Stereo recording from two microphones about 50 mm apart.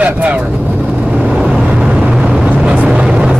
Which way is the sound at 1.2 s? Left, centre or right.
Centre.